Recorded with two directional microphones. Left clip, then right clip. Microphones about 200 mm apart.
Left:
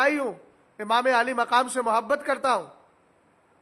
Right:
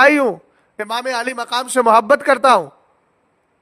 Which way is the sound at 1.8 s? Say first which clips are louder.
Right 12 dB; 50° right (ahead or behind).